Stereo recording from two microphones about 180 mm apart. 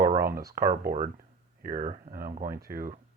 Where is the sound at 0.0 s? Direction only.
55° right (ahead or behind).